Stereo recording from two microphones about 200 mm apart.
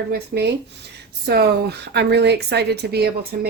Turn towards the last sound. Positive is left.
turn(degrees=-50)  # may be behind; listen again after turning